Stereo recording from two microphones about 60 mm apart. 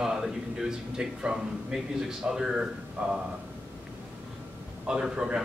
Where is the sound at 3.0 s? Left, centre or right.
Right.